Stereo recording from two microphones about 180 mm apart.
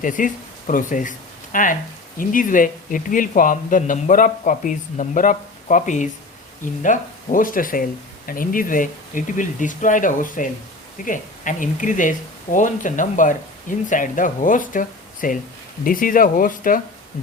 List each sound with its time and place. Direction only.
0.0 s a man's voice: 45° left (ahead or behind)